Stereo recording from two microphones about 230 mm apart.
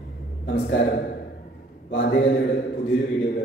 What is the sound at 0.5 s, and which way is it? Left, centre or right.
A woman's voice, left.